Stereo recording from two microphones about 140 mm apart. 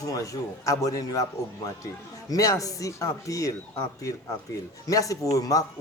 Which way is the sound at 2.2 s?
25° left (ahead or behind).